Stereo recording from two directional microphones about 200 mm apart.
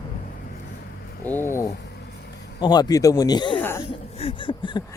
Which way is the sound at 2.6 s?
20° left (ahead or behind).